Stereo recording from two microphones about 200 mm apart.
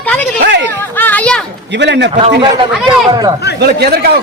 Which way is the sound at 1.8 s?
60° right (ahead or behind).